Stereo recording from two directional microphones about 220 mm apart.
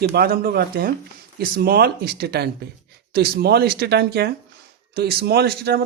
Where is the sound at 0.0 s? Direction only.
45° right (ahead or behind).